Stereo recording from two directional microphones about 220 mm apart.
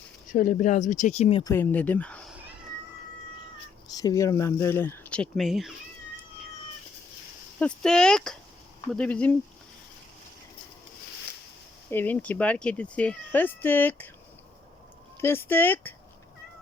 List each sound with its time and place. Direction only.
0.3 s speech: 35° left (ahead or behind)
1.5 s speech: 10° left (ahead or behind)
3.9 s speech: 15° left (ahead or behind); by 5.7 s centre (ahead or behind)
7.6 s speech: 5° left (ahead or behind)
11.9 s speech: 10° left (ahead or behind)
15.2 s speech: 10° left (ahead or behind)